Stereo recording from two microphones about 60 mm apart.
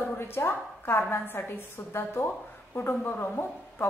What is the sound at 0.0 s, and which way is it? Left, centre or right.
A woman's voice, left.